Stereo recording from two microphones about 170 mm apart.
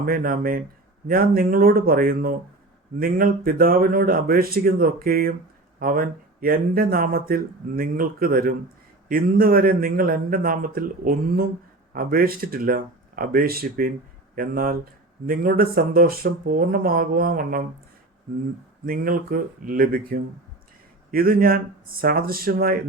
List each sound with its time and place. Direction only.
0.0 s speech: 55° right (ahead or behind)
18.9 s speech: 55° right (ahead or behind)